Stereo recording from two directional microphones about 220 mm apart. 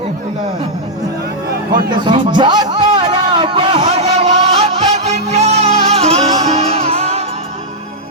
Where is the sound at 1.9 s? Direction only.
20° right (ahead or behind).